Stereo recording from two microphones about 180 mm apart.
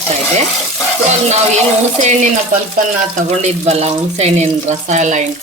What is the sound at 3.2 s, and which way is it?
Speech, 40° right (ahead or behind).